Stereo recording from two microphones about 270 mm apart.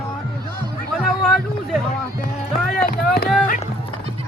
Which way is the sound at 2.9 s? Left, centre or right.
Left.